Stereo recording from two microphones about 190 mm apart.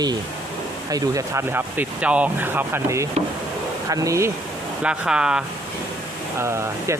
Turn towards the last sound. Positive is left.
turn(degrees=-15)  # may be behind; listen again after turning